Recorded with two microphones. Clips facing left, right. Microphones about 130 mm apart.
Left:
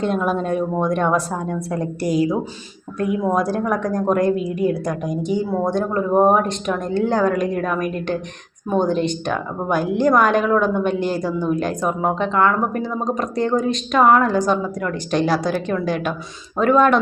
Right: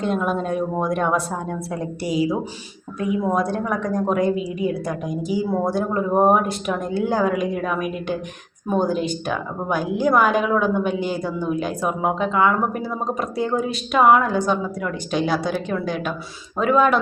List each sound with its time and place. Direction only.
0.0 s a woman's voice: centre (ahead or behind)